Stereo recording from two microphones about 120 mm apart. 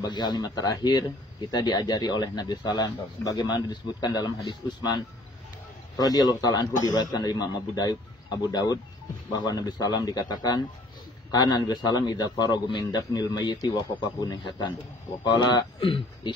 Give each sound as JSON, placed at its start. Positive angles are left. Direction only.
{"t": 0.0, "sound": "speech", "side_deg": 40}